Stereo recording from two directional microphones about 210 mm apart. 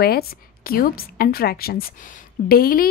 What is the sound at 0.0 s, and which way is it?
A woman's voice, 45° left (ahead or behind).